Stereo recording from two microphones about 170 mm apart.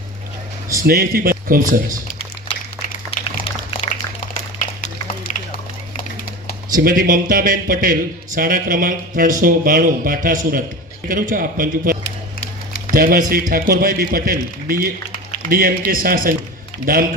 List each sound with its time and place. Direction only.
0.8 s speech: 60° right (ahead or behind)
3.1 s a sound: 30° left (ahead or behind)
5.3 s run: 45° left (ahead or behind)
6.7 s speech: 55° right (ahead or behind)